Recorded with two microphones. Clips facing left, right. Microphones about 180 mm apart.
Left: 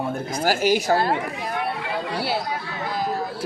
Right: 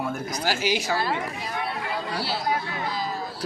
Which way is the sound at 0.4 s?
45° left (ahead or behind).